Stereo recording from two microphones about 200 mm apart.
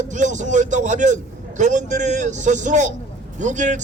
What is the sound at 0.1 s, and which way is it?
Speech, 40° right (ahead or behind).